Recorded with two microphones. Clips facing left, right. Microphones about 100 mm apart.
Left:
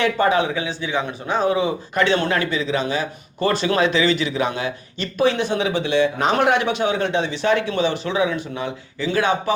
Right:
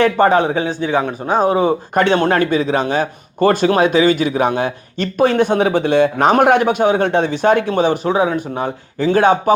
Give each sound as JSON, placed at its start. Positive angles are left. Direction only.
{"t": 0.0, "sound": "speech", "side_deg": -45}